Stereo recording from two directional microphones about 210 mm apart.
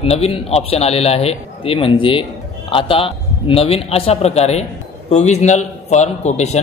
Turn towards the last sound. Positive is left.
turn(degrees=30)  # may be behind; listen again after turning